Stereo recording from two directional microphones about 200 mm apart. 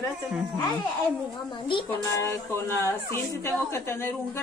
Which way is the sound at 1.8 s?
15° left (ahead or behind).